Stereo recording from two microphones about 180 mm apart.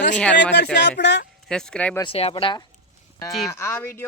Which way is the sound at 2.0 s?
30° left (ahead or behind).